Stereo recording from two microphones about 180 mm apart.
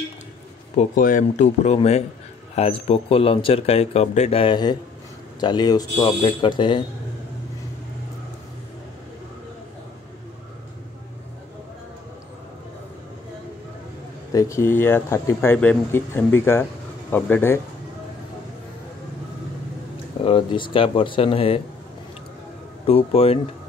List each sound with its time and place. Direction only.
0.7 s speech: 50° left (ahead or behind); by 6.8 s 25° left (ahead or behind)
14.3 s speech: 15° left (ahead or behind)
20.2 s speech: 25° left (ahead or behind)
22.8 s speech: 35° left (ahead or behind)